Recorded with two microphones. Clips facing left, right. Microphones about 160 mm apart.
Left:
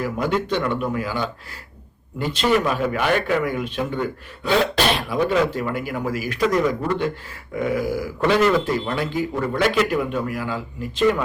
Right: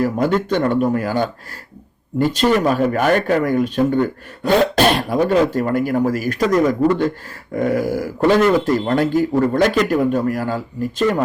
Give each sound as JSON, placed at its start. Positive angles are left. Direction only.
{"t": 0.0, "sound": "speech", "side_deg": -45}